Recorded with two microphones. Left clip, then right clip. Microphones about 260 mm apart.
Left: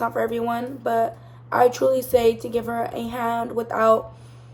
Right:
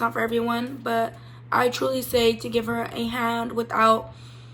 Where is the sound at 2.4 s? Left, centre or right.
Right.